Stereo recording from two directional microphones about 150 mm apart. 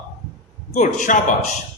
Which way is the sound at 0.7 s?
55° left (ahead or behind).